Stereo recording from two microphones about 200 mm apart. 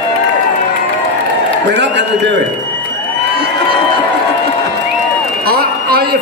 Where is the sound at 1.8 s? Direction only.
60° right (ahead or behind).